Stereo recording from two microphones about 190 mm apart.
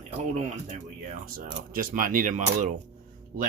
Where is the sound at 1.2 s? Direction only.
50° right (ahead or behind).